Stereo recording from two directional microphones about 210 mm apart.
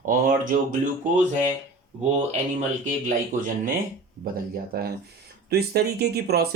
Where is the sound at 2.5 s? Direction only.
35° right (ahead or behind).